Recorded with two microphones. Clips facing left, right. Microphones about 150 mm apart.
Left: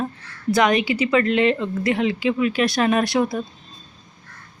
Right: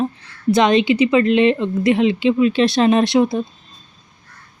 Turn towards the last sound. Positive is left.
turn(degrees=-20)  # may be behind; listen again after turning